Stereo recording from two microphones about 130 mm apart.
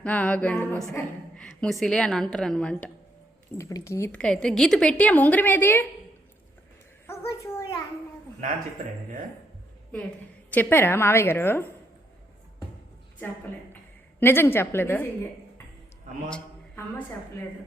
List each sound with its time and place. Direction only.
0.0 s a woman's voice: 10° left (ahead or behind)
3.6 s a woman's voice: 25° left (ahead or behind)
4.1 s a woman's voice: 5° left (ahead or behind)
7.1 s a sound: 20° left (ahead or behind)
10.5 s a woman's voice: 15° left (ahead or behind)
14.2 s a woman's voice: 15° left (ahead or behind)